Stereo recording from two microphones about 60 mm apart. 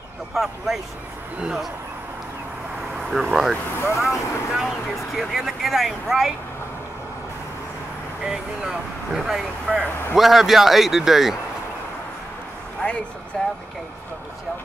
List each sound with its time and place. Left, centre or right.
0.3 s speech: centre
3.0 s speech: centre
8.3 s speech: centre
9.7 s speech: centre
10.1 s speech: centre
13.4 s speech: centre